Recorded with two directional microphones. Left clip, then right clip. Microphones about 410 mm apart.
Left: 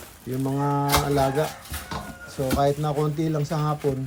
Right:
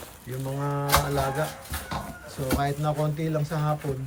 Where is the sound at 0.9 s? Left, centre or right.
Centre.